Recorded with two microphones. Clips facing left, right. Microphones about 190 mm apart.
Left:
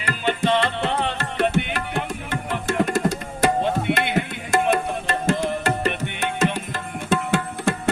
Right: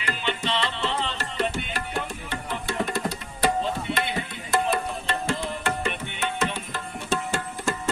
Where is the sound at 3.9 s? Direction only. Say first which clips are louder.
Left 6 dB; 70° left (ahead or behind).